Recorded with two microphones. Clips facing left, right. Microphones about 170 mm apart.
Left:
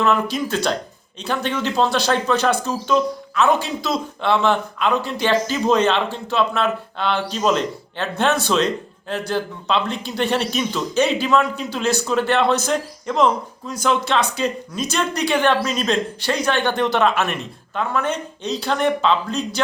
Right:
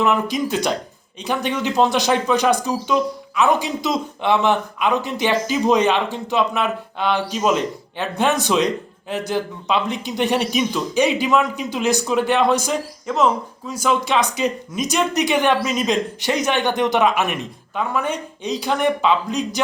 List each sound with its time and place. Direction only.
0.0 s speech: 15° right (ahead or behind)